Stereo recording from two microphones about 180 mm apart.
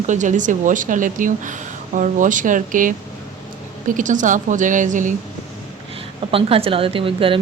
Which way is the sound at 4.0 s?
45° right (ahead or behind).